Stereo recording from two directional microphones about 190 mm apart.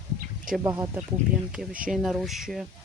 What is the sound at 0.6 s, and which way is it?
Speech, 15° right (ahead or behind).